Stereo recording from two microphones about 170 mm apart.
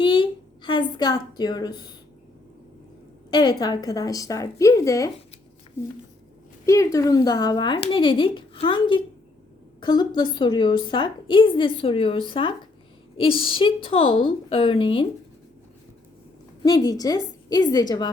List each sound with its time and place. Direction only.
0.0 s a woman's voice: 30° left (ahead or behind)
3.2 s a woman's voice: 25° left (ahead or behind)
6.7 s a woman's voice: 20° left (ahead or behind)
16.6 s a woman's voice: 20° left (ahead or behind)